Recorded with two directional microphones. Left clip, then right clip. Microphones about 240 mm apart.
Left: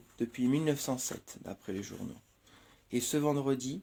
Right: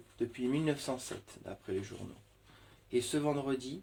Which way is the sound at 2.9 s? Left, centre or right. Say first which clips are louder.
Left 1 dB; left.